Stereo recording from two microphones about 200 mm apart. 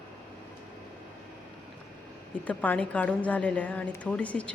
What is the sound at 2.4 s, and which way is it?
A woman's voice, 5° left (ahead or behind).